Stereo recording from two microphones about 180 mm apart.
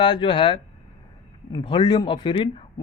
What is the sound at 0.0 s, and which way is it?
A man's voice, 25° left (ahead or behind).